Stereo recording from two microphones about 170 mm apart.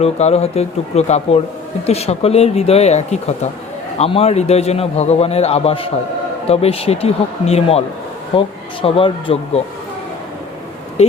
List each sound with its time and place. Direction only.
0.0 s a man's voice: 40° left (ahead or behind)